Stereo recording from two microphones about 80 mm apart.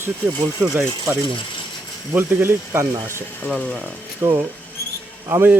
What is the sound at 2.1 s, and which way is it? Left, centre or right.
Speech, right.